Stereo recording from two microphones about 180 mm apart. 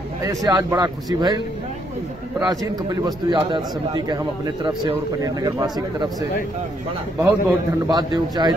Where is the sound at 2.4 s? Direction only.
25° right (ahead or behind).